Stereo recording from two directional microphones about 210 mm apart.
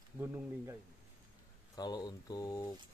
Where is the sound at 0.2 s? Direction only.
10° right (ahead or behind).